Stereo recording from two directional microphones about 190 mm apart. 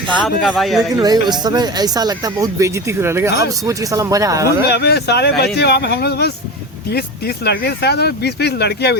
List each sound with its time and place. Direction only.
0.4 s speech: centre (ahead or behind)
0.9 s speech: 20° right (ahead or behind)
4.7 s speech: 60° left (ahead or behind)